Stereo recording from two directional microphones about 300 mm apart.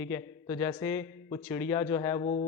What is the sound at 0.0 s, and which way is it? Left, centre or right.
A man's voice, centre.